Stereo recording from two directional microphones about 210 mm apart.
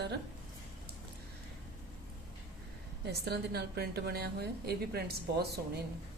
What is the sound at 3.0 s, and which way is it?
Speech, 50° right (ahead or behind).